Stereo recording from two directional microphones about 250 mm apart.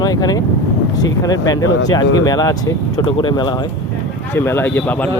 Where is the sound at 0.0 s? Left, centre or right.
Centre.